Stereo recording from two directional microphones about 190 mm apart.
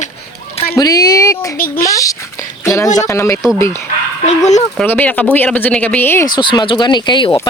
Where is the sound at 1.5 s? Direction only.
50° left (ahead or behind).